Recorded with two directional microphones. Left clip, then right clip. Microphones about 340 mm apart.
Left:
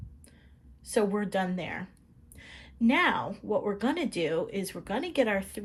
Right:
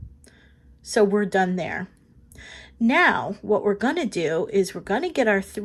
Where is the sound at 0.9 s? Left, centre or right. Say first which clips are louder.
Right 8 dB; centre.